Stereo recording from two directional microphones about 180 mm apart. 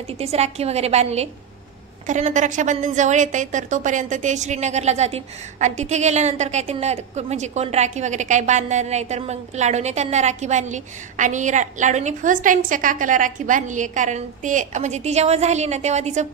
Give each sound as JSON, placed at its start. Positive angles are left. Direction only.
{"t": 0.2, "sound": "a woman's voice", "side_deg": -35}